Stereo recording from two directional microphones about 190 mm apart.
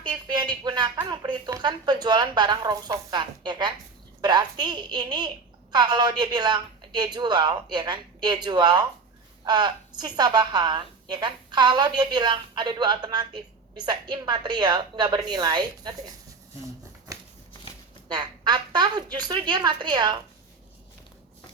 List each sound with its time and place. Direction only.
0.0 s a woman's voice: 25° right (ahead or behind)
18.1 s a woman's voice: 20° right (ahead or behind)